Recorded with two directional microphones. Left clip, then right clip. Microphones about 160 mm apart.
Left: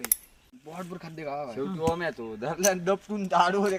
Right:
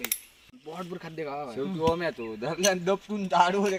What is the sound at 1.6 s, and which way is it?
Speech, 30° right (ahead or behind).